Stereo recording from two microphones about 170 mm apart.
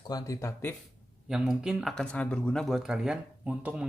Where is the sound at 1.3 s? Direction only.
5° right (ahead or behind).